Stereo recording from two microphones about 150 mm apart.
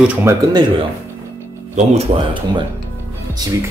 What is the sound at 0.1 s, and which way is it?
Speech, 20° right (ahead or behind).